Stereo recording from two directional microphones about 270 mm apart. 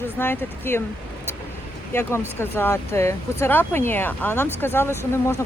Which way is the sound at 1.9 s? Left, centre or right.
Centre.